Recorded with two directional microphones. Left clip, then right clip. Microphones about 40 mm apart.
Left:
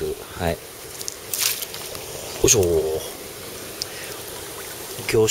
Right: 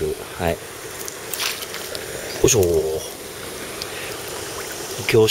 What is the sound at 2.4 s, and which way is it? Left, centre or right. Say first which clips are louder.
Speech: right 1 dB; left.